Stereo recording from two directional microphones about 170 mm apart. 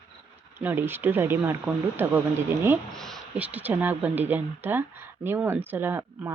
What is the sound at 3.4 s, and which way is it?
Speech, 10° right (ahead or behind).